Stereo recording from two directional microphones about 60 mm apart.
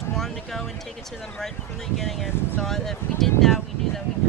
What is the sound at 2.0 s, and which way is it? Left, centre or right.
Speech, centre.